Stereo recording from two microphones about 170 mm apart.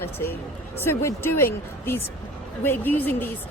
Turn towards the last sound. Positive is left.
turn(degrees=10)  # may be behind; listen again after turning